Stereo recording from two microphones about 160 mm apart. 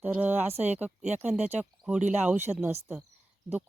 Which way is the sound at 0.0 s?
10° right (ahead or behind).